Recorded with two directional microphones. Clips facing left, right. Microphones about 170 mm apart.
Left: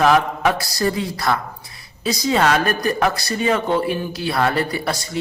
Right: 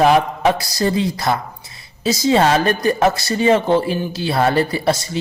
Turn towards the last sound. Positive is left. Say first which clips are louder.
# right 5 dB
turn(degrees=-25)  # may be behind; listen again after turning